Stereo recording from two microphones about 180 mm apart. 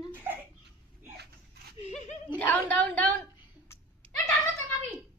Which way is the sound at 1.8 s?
40° left (ahead or behind).